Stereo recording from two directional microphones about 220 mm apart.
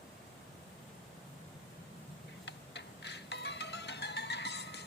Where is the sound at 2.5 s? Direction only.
50° left (ahead or behind).